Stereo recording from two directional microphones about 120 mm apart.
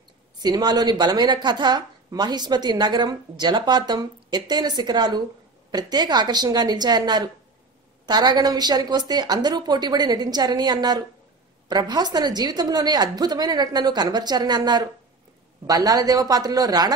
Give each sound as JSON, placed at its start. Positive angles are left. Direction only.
{"t": 0.4, "sound": "speech", "side_deg": -35}